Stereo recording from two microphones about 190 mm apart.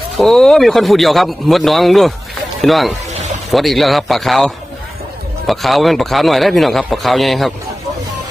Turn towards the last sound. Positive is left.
turn(degrees=0)  # may be behind; listen again after turning